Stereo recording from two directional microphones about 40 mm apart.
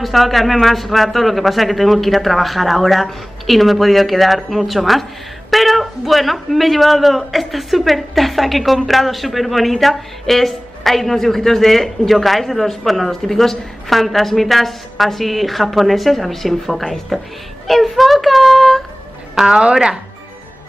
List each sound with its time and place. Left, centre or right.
0.0 s a man's voice: centre
17.6 s a sound: centre
19.3 s a woman's voice: centre